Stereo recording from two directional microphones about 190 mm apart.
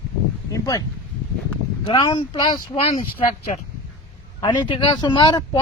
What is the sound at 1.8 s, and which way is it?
Speech, 25° left (ahead or behind).